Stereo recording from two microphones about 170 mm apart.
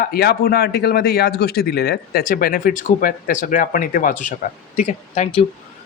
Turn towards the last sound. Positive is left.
turn(degrees=40)  # may be behind; listen again after turning